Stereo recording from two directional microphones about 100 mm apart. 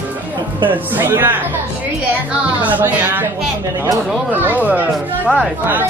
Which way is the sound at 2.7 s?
20° right (ahead or behind).